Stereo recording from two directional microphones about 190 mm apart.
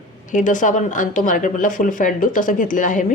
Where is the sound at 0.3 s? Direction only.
40° left (ahead or behind).